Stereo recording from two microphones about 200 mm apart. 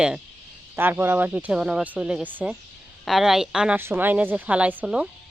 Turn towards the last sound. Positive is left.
turn(degrees=-5)  # may be behind; listen again after turning